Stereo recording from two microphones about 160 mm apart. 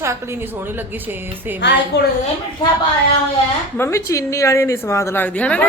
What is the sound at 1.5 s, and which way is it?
Speech, 90° left.